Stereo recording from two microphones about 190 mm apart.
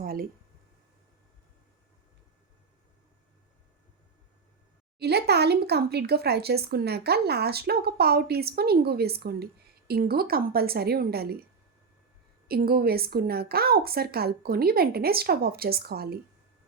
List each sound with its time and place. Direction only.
0.0 s a sound: 50° right (ahead or behind)
4.9 s speech: 60° right (ahead or behind)
12.5 s a woman's voice: 55° right (ahead or behind)